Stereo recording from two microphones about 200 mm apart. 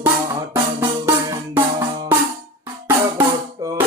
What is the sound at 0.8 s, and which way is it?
Music, 15° right (ahead or behind).